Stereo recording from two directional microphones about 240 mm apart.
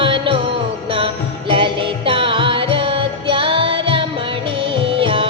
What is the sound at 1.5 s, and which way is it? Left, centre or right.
Music, right.